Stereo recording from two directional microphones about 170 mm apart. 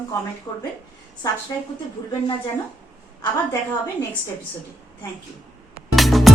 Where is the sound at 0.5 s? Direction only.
25° left (ahead or behind).